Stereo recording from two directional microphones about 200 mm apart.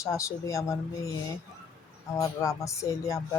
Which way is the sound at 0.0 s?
15° left (ahead or behind).